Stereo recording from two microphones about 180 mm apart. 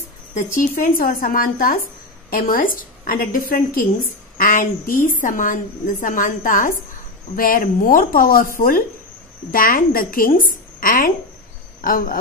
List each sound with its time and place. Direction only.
0.3 s a woman's voice: 45° left (ahead or behind)